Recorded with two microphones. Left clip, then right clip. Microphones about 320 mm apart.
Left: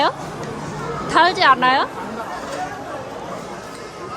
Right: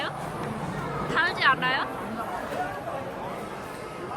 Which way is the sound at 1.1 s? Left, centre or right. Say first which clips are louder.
Left 10 dB; centre.